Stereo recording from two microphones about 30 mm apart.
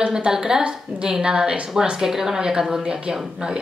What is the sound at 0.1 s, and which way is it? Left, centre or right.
A woman's voice, right.